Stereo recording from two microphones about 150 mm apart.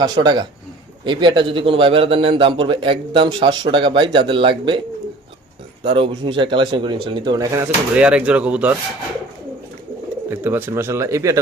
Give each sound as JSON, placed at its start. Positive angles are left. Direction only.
{"t": 0.0, "sound": "a man's voice", "side_deg": -30}
{"t": 5.8, "sound": "a man's voice", "side_deg": -35}
{"t": 7.6, "sound": "speech", "side_deg": -10}
{"t": 10.2, "sound": "speech", "side_deg": -15}